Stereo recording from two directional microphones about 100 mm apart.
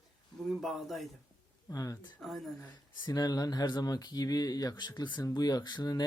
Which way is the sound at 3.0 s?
40° left (ahead or behind).